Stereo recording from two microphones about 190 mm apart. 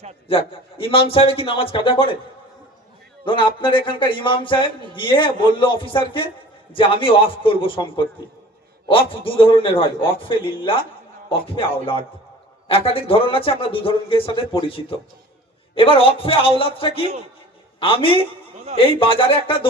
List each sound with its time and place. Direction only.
0.3 s speech: 30° left (ahead or behind)
3.2 s speech: 25° left (ahead or behind)